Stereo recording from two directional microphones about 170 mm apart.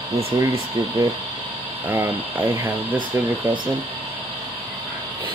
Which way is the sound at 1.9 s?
15° right (ahead or behind).